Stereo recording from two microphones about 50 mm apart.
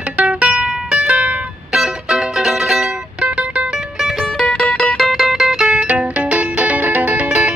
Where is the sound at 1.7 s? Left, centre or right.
Centre.